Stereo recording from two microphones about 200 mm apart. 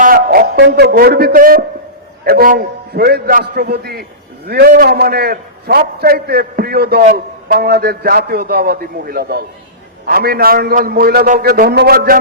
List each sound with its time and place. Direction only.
0.0 s a man's voice: 45° right (ahead or behind)